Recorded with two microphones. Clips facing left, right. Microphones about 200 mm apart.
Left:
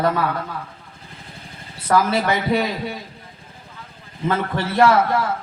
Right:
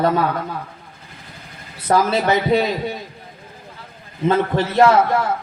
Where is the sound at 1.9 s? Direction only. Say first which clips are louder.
Right 2 dB; 25° right (ahead or behind).